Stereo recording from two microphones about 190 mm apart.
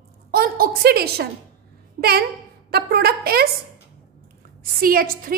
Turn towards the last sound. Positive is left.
turn(degrees=-50)  # may be behind; listen again after turning